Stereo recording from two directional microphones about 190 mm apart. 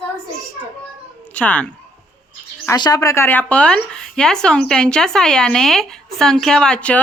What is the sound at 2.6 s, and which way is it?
Speech, 20° left (ahead or behind).